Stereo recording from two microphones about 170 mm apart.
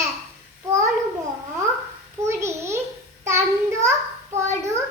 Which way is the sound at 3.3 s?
15° right (ahead or behind).